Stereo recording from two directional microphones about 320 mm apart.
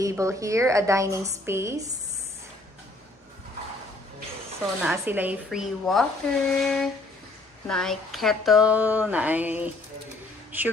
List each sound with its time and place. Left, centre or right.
0.0 s a woman's voice: centre
4.8 s speech: centre